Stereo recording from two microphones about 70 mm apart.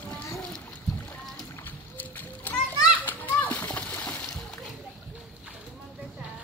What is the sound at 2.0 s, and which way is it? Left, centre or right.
Splash, left.